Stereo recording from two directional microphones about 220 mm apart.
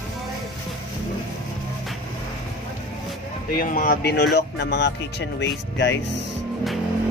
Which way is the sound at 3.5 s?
40° left (ahead or behind).